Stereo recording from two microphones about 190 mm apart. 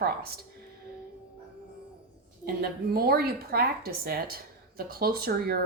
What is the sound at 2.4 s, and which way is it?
A woman's voice, 50° right (ahead or behind).